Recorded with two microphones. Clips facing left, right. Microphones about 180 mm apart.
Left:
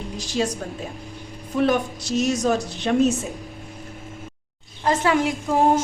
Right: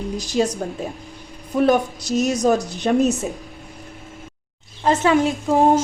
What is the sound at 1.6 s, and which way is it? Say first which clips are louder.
Speech: right 4 dB; 40° right (ahead or behind).